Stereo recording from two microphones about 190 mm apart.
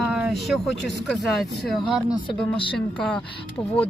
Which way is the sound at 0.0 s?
Centre (ahead or behind).